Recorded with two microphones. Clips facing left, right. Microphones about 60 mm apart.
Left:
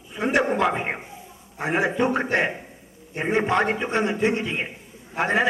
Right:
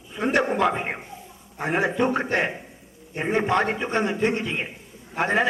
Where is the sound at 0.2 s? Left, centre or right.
Centre.